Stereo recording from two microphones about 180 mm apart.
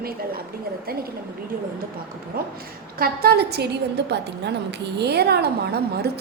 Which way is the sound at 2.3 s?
55° right (ahead or behind).